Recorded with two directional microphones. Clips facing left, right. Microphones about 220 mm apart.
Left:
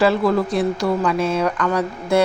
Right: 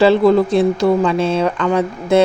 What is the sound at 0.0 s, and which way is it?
Speech, 25° right (ahead or behind).